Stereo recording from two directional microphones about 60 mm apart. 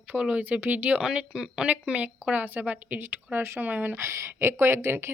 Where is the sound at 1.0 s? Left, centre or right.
Centre; by 4.0 s right.